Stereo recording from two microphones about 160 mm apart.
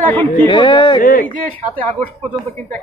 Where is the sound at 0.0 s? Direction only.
10° left (ahead or behind).